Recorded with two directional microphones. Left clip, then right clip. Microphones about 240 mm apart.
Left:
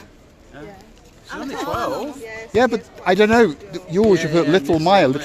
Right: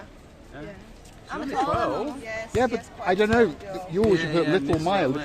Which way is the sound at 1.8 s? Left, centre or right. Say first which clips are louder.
Left 2 dB; left.